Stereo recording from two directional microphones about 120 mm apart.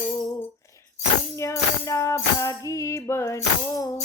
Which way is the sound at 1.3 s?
25° left (ahead or behind).